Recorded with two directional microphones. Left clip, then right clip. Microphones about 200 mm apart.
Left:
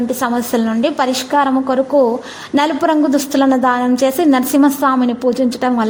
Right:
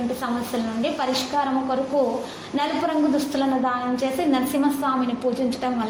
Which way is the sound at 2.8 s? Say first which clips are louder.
Left 8 dB; 45° left (ahead or behind).